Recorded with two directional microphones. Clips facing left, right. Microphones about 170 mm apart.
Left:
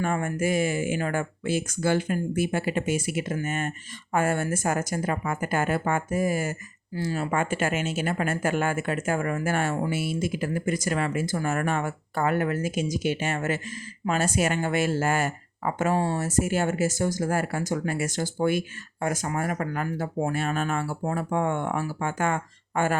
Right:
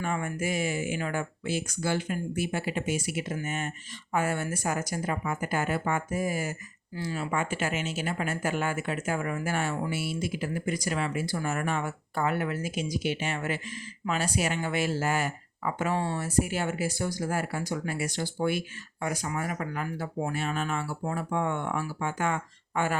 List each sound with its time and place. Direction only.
0.0 s speech: 45° left (ahead or behind)